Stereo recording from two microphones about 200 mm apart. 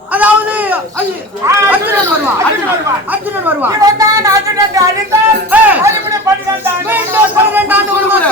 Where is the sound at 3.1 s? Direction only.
10° right (ahead or behind).